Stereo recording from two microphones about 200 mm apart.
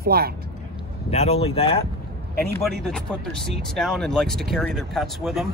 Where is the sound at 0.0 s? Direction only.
50° right (ahead or behind).